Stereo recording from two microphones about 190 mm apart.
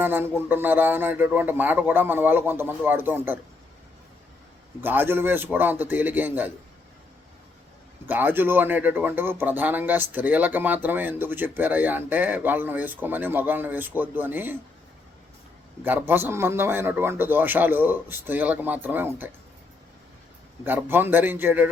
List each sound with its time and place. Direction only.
0.0 s speech: 10° right (ahead or behind)
4.8 s speech: 10° right (ahead or behind)
8.0 s speech: 10° right (ahead or behind)
15.8 s speech: 10° right (ahead or behind)
20.7 s speech: 10° right (ahead or behind)